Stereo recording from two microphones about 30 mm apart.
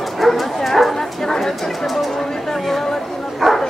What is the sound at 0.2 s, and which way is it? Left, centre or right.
Bow-wow, centre.